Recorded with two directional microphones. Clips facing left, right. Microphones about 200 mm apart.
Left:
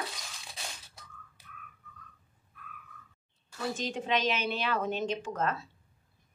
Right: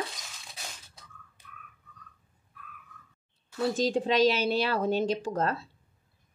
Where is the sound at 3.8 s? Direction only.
35° right (ahead or behind).